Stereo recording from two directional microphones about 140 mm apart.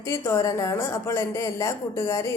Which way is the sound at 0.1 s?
20° left (ahead or behind).